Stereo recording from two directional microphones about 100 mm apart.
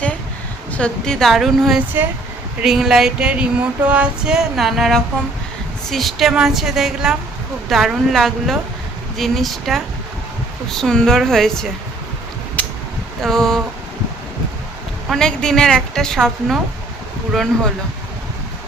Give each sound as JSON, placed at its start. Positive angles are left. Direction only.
{"t": 0.7, "sound": "a woman's voice", "side_deg": 10}
{"t": 12.6, "sound": "a sound", "side_deg": 15}
{"t": 13.2, "sound": "a woman's voice", "side_deg": 5}
{"t": 15.1, "sound": "a woman's voice", "side_deg": 5}